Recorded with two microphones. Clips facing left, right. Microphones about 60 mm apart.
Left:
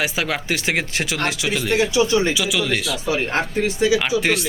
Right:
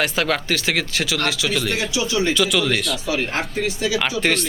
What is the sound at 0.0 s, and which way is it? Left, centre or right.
Speech, centre.